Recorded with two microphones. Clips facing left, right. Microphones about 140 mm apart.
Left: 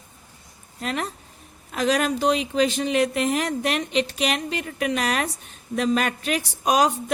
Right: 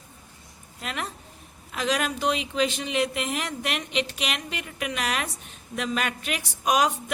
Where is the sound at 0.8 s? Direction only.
40° left (ahead or behind).